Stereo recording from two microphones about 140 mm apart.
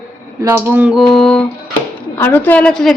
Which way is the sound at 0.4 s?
15° right (ahead or behind).